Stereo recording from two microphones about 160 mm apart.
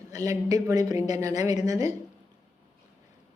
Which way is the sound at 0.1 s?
20° right (ahead or behind).